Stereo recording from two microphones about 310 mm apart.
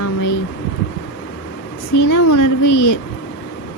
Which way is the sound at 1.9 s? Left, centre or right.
Left.